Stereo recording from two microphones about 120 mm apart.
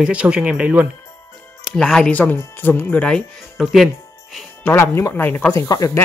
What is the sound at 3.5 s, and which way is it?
Speech, centre (ahead or behind).